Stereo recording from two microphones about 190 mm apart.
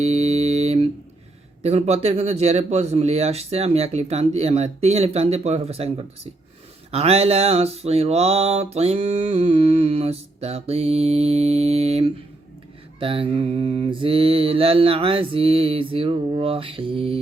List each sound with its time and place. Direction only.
0.0 s mantra: 35° right (ahead or behind)